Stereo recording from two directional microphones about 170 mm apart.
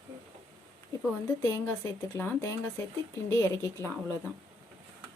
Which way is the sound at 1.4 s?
15° left (ahead or behind).